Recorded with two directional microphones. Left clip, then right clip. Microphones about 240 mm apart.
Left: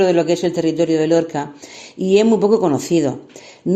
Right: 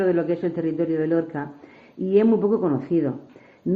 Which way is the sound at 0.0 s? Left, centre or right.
Left.